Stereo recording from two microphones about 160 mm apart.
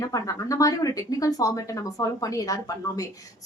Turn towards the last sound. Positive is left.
turn(degrees=20)  # may be behind; listen again after turning